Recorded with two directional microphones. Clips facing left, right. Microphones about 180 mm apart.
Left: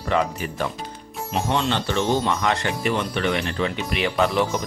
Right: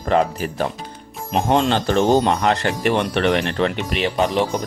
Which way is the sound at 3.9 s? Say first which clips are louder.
Even; 20° right (ahead or behind).